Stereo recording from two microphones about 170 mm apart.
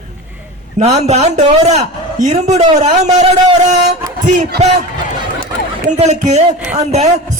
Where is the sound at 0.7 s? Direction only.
40° right (ahead or behind).